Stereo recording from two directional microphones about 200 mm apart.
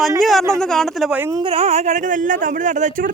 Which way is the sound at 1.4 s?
30° right (ahead or behind).